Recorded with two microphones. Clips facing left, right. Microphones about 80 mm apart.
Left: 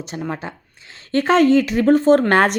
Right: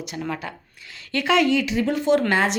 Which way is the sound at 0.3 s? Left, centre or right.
Left.